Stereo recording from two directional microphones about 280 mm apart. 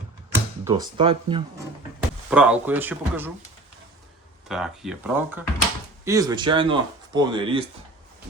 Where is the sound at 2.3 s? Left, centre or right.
Centre.